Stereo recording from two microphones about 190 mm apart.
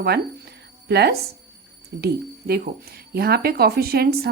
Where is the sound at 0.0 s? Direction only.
55° right (ahead or behind).